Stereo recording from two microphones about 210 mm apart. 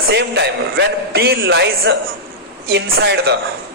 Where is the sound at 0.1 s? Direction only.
55° right (ahead or behind).